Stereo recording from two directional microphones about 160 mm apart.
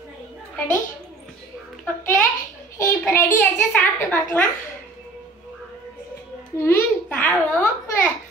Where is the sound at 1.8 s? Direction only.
10° left (ahead or behind).